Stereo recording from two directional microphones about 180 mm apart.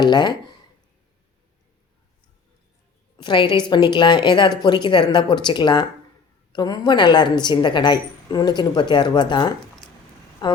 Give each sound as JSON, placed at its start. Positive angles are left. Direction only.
{"t": 0.0, "sound": "a woman's voice", "side_deg": 25}
{"t": 3.2, "sound": "a woman's voice", "side_deg": 25}